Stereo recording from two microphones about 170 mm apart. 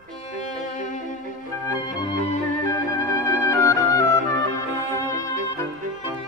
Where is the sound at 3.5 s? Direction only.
15° left (ahead or behind).